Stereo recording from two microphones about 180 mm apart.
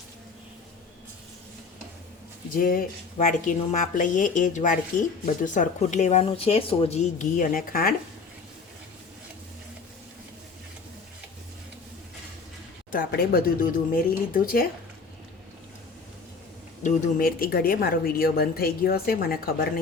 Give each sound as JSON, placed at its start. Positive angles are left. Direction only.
{"t": 2.6, "sound": "a woman's voice", "side_deg": 50}
{"t": 12.9, "sound": "a woman's voice", "side_deg": 55}
{"t": 16.8, "sound": "speech", "side_deg": 55}